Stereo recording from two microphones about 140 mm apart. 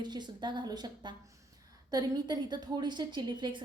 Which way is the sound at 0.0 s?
30° right (ahead or behind).